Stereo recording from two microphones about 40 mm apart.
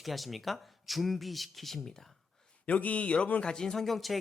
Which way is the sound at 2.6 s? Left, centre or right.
Left.